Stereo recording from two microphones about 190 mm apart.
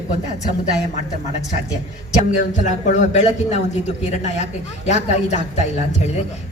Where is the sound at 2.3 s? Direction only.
40° left (ahead or behind).